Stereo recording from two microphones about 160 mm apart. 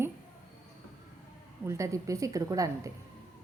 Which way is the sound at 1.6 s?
20° right (ahead or behind).